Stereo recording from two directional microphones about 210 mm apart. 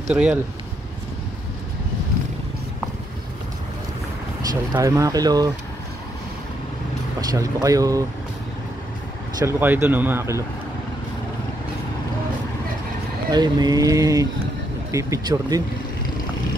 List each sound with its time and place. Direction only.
0.1 s speech: 5° right (ahead or behind)
4.5 s speech: 15° right (ahead or behind)
7.2 s speech: 15° right (ahead or behind)
9.4 s speech: 10° right (ahead or behind)
13.3 s speech: 20° right (ahead or behind)